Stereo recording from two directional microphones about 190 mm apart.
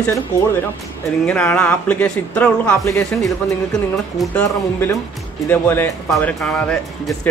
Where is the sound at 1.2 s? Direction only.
5° left (ahead or behind).